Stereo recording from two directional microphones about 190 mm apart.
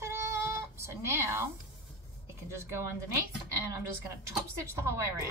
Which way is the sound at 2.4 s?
15° right (ahead or behind).